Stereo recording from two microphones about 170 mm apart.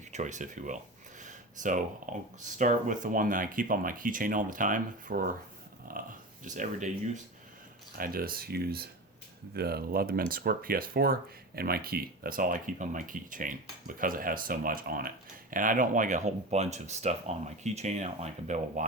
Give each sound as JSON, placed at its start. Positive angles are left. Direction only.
{"t": 0.1, "sound": "speech", "side_deg": -45}
{"t": 7.9, "sound": "speech", "side_deg": -60}